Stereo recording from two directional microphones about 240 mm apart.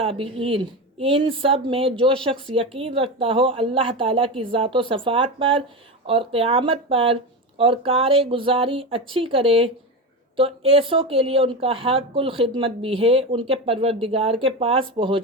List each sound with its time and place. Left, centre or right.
0.0 s speech: right